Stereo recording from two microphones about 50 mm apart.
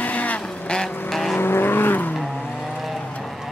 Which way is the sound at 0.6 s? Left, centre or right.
Centre.